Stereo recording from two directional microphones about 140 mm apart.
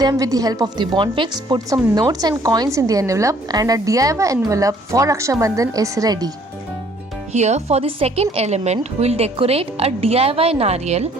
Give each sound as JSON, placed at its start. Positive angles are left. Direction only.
{"t": 0.0, "sound": "speech", "side_deg": -25}
{"t": 7.3, "sound": "a woman's voice", "side_deg": -55}